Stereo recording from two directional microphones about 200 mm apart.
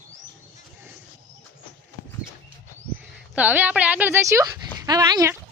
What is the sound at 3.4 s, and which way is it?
Speech, 10° right (ahead or behind).